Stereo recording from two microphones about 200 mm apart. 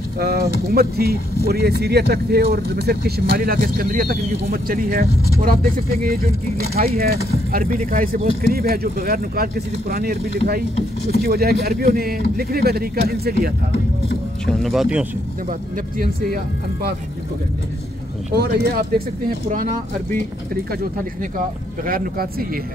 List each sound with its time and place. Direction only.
0.2 s speech: 50° right (ahead or behind)
14.4 s speech: centre (ahead or behind)
18.3 s speech: 50° right (ahead or behind)
21.8 s speech: 45° right (ahead or behind)